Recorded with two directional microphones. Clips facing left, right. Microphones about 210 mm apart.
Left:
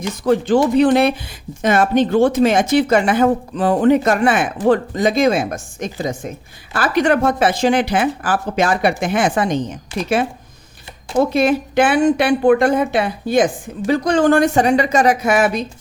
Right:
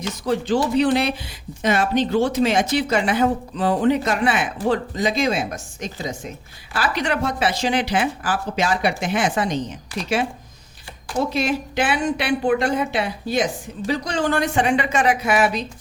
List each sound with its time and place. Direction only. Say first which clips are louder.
0.3 s a woman's voice: left 6 dB; 55° left (ahead or behind)
11.2 s a woman's voice: left 7 dB; 50° left (ahead or behind)